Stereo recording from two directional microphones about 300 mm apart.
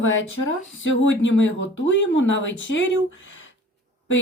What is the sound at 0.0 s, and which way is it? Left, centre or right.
A woman's voice, left.